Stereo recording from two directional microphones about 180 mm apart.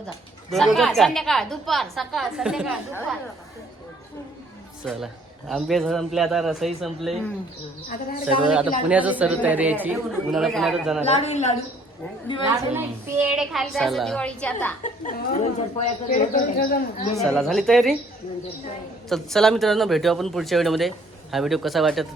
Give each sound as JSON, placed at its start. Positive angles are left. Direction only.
{"t": 0.5, "sound": "speech", "side_deg": 0}
{"t": 4.9, "sound": "speech", "side_deg": 0}
{"t": 8.9, "sound": "speech", "side_deg": -10}
{"t": 11.0, "sound": "a woman's voice", "side_deg": 35}
{"t": 12.5, "sound": "speech", "side_deg": -10}
{"t": 15.1, "sound": "speech", "side_deg": 45}
{"t": 17.2, "sound": "speech", "side_deg": 0}
{"t": 19.0, "sound": "speech", "side_deg": 0}